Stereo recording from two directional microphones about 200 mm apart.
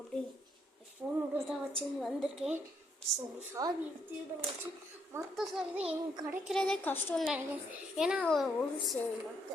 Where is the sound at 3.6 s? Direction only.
15° right (ahead or behind).